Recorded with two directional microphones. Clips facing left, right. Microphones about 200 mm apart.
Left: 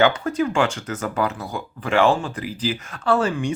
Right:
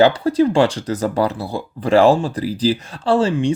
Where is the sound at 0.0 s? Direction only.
35° right (ahead or behind).